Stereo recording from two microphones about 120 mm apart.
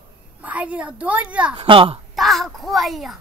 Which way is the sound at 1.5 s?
45° right (ahead or behind).